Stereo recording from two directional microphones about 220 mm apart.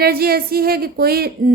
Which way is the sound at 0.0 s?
45° right (ahead or behind).